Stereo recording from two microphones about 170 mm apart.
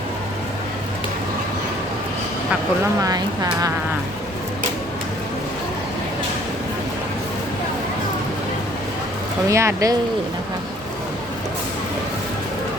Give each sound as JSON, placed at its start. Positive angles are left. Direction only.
{"t": 3.0, "sound": "speech", "side_deg": -20}
{"t": 9.5, "sound": "speech", "side_deg": -15}